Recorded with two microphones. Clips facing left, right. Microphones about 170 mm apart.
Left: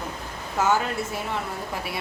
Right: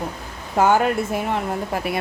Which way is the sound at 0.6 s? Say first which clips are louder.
Right 6 dB; 55° right (ahead or behind).